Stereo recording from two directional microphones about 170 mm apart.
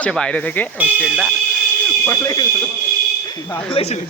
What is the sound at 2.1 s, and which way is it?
Speech, 20° left (ahead or behind).